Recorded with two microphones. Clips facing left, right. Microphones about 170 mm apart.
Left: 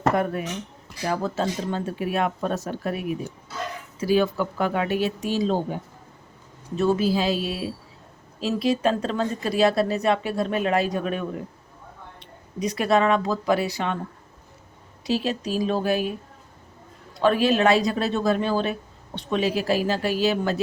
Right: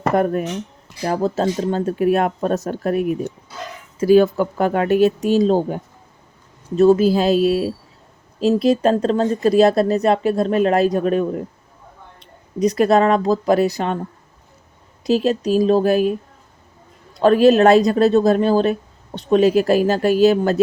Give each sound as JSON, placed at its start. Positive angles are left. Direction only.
{"t": 0.2, "sound": "speech", "side_deg": -45}
{"t": 15.0, "sound": "speech", "side_deg": -40}
{"t": 17.2, "sound": "speech", "side_deg": -40}